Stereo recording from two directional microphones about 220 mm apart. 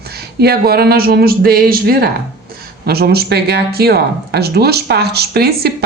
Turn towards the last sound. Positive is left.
turn(degrees=-45)  # may be behind; listen again after turning